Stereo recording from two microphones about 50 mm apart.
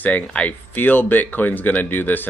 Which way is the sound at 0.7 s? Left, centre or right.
Left.